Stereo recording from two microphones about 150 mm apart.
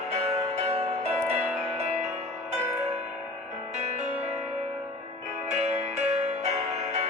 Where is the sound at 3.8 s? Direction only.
50° right (ahead or behind).